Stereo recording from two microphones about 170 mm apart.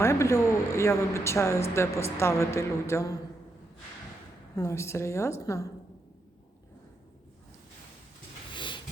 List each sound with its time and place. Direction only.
0.0 s speech: 15° left (ahead or behind)
4.5 s speech: 15° left (ahead or behind)
8.5 s train: 30° left (ahead or behind)